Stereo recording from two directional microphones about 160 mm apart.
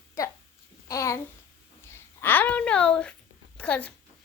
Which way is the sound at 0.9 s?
20° left (ahead or behind).